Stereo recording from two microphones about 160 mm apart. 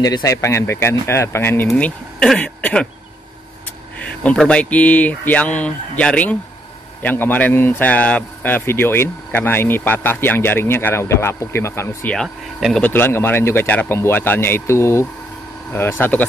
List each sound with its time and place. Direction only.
0.0 s speech: 20° left (ahead or behind); by 2.9 s 5° left (ahead or behind)
4.0 s speech: 10° left (ahead or behind)